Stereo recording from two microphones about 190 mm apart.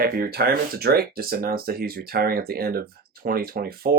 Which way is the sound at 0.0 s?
50° right (ahead or behind).